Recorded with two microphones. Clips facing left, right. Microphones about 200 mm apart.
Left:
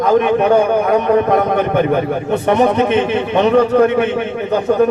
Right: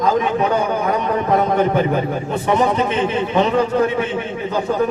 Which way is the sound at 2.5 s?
65° left (ahead or behind).